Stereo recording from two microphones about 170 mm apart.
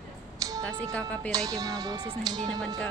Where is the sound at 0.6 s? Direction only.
5° left (ahead or behind).